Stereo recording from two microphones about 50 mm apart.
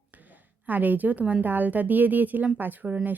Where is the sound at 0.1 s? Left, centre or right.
Right.